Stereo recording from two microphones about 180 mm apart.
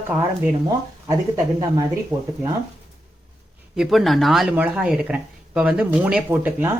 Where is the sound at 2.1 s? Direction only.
15° right (ahead or behind).